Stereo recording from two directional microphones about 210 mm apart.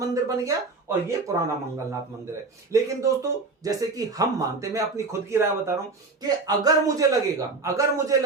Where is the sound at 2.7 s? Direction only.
15° right (ahead or behind).